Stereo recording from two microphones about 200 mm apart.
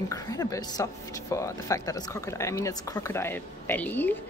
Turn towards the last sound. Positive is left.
turn(degrees=10)  # may be behind; listen again after turning